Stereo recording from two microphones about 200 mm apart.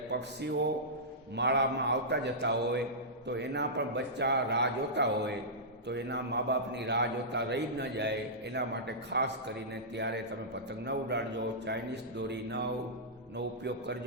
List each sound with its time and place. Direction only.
1.4 s a man's voice: 60° right (ahead or behind)